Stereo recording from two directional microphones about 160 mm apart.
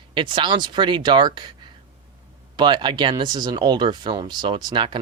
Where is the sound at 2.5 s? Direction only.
30° right (ahead or behind).